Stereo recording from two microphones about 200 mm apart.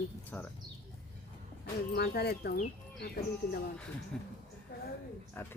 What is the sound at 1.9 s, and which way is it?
Speech, 55° left (ahead or behind).